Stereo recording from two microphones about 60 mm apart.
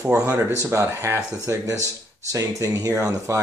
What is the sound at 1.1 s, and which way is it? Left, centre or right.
Speech, right.